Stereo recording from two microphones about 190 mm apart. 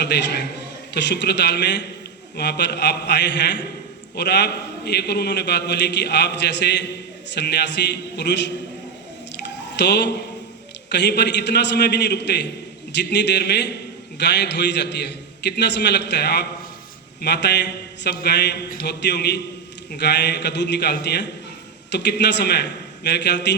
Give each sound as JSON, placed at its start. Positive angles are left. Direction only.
{"t": 0.0, "sound": "a man's voice", "side_deg": 65}
{"t": 9.4, "sound": "squish", "side_deg": 65}
{"t": 10.8, "sound": "a man's voice", "side_deg": 65}